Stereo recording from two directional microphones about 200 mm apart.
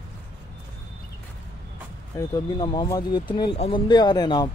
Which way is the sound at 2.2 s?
20° left (ahead or behind).